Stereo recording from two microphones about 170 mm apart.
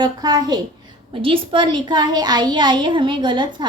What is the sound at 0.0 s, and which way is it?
A woman's voice, 25° right (ahead or behind).